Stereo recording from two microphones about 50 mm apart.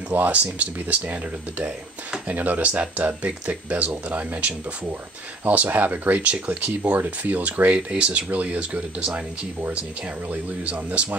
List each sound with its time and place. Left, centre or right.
0.1 s speech: right
2.2 s speech: right
10.3 s speech: right